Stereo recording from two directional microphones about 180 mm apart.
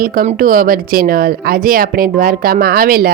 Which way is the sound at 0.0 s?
50° right (ahead or behind).